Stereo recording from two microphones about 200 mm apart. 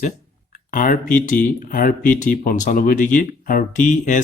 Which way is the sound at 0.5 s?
40° left (ahead or behind).